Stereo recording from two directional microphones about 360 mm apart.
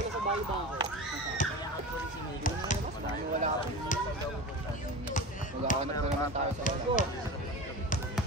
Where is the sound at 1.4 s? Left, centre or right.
Left.